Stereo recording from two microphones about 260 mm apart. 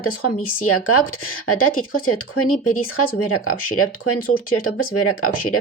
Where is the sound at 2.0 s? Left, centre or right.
Left.